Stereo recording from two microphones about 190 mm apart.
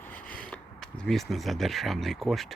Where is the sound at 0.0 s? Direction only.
10° left (ahead or behind).